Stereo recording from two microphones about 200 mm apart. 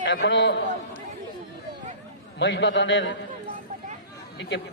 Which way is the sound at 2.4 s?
65° left (ahead or behind).